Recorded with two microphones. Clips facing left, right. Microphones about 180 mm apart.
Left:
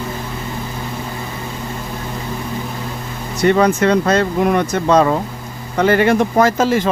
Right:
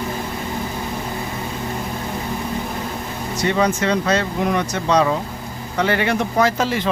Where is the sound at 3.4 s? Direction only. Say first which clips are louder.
Left 6 dB; 55° left (ahead or behind).